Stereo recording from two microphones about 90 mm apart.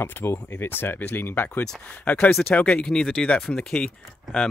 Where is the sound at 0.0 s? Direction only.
25° left (ahead or behind).